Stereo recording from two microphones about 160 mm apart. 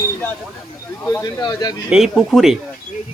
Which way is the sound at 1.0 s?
20° left (ahead or behind).